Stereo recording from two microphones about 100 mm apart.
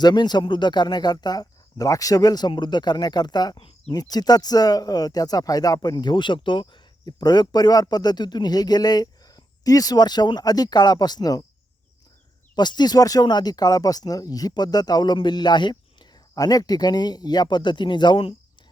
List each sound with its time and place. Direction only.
0.0 s speech: 45° left (ahead or behind)
7.0 s speech: 45° left (ahead or behind)
12.5 s speech: 45° left (ahead or behind)